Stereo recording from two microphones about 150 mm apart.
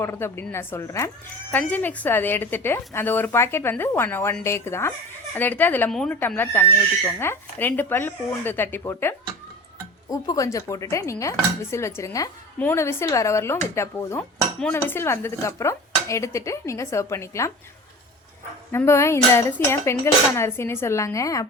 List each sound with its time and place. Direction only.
0.0 s speech: 15° left (ahead or behind)
18.7 s speech: 15° left (ahead or behind)